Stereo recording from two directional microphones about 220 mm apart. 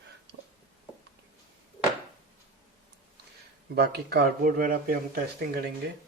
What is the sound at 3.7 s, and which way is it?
Speech, 45° right (ahead or behind).